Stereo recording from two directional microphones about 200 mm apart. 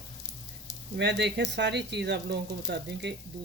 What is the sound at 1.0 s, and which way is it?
Speech, 60° right (ahead or behind).